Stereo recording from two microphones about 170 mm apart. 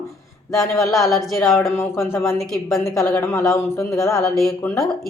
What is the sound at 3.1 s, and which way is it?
A woman's voice, 15° left (ahead or behind).